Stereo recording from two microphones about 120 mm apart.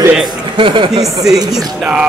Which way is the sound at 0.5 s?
45° right (ahead or behind).